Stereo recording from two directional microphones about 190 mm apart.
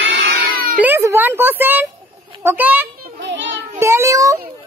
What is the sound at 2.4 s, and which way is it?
Speech, 10° right (ahead or behind).